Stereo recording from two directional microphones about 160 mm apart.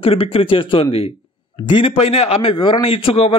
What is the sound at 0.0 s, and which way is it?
Speech, 35° left (ahead or behind).